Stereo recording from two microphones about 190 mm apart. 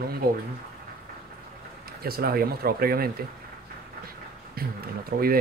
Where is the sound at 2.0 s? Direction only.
55° right (ahead or behind).